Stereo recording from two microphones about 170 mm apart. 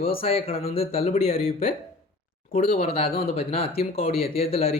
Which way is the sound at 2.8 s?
35° left (ahead or behind).